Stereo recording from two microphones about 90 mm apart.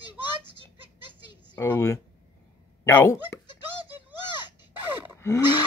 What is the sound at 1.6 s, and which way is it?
Speech, 30° left (ahead or behind).